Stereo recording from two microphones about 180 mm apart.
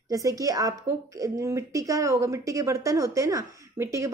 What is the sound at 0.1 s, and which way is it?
A woman's voice, 20° right (ahead or behind).